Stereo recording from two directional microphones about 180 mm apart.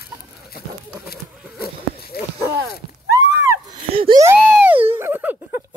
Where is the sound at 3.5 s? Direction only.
25° right (ahead or behind).